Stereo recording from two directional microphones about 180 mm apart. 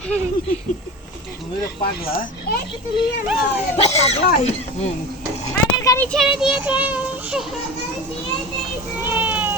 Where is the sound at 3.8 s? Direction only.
35° left (ahead or behind).